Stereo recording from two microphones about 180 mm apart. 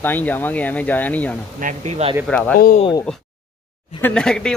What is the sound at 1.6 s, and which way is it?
Speech, 40° right (ahead or behind).